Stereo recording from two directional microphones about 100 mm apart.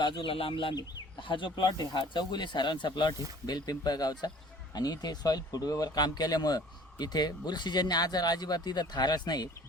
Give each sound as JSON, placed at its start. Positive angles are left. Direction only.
{"t": 0.0, "sound": "speech", "side_deg": 60}